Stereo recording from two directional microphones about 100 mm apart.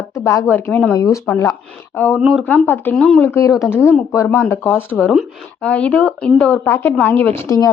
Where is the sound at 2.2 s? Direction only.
5° right (ahead or behind).